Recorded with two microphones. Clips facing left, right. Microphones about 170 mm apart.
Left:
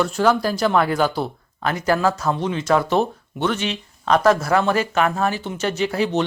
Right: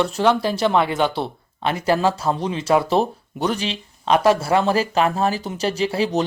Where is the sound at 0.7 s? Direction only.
25° right (ahead or behind).